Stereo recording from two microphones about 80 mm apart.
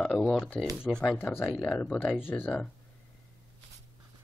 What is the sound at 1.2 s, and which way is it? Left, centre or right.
Speech, left.